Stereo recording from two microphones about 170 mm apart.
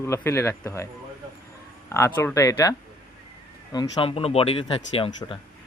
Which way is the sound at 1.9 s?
15° left (ahead or behind).